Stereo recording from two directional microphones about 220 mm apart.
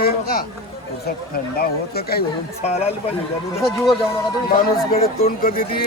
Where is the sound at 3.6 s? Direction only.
Centre (ahead or behind).